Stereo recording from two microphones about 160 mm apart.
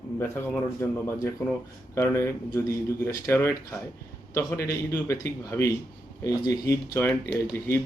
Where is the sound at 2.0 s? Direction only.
15° left (ahead or behind).